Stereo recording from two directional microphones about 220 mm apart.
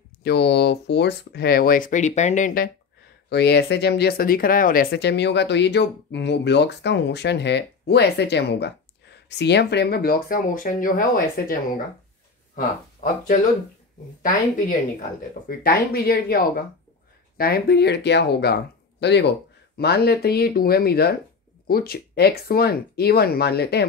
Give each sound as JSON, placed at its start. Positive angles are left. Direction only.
{"t": 0.2, "sound": "speech", "side_deg": 50}
{"t": 15.4, "sound": "speech", "side_deg": 40}